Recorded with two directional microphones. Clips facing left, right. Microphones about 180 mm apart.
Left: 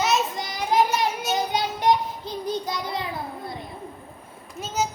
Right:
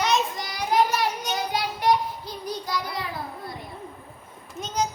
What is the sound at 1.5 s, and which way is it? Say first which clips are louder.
Child singing: even; 20° left (ahead or behind).